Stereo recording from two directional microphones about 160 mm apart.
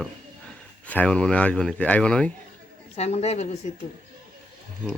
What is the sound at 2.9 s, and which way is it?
Speech, 40° left (ahead or behind).